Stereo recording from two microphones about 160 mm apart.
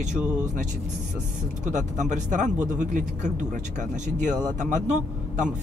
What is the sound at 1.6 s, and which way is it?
Speech, 50° right (ahead or behind).